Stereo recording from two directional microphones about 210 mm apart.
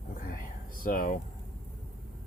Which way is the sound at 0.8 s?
40° left (ahead or behind).